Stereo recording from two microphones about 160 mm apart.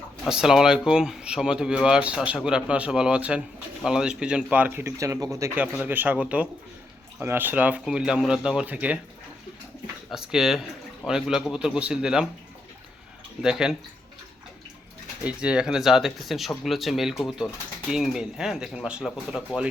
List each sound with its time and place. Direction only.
0.3 s speech: 5° right (ahead or behind)
10.1 s speech: 5° right (ahead or behind)
13.4 s speech: 5° right (ahead or behind)
15.2 s speech: 5° right (ahead or behind)